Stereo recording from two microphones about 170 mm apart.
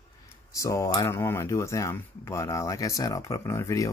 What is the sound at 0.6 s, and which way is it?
Speech, 20° left (ahead or behind).